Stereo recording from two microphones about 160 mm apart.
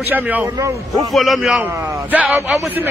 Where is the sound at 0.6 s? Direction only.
20° right (ahead or behind).